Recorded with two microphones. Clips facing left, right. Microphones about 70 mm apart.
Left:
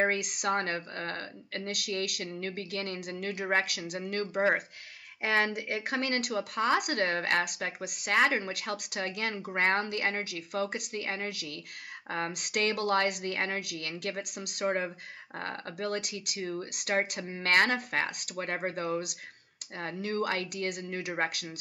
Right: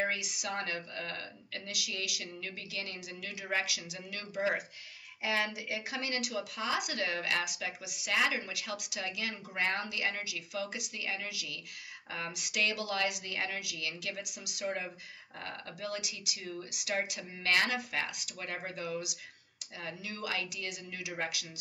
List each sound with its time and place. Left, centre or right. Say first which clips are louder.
0.0 s a woman's voice: left 6 dB; left